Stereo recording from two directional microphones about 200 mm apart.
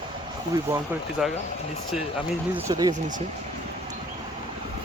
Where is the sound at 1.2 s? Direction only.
5° right (ahead or behind).